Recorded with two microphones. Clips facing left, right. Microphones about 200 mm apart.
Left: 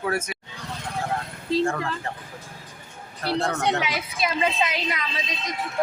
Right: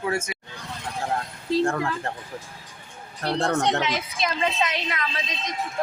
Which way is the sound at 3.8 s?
5° left (ahead or behind).